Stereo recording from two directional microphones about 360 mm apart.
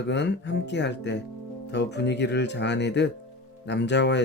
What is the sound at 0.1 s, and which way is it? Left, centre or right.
Speech, left.